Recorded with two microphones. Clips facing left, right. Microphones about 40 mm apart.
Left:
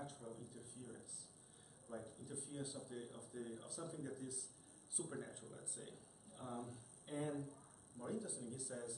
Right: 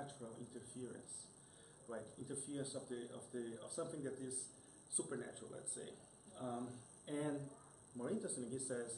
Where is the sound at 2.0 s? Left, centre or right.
Centre.